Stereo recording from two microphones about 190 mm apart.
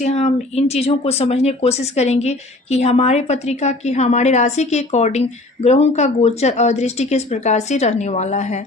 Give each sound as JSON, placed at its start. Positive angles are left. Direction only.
{"t": 0.0, "sound": "speech", "side_deg": 35}